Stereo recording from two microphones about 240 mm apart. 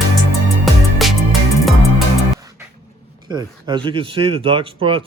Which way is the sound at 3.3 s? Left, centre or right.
Centre.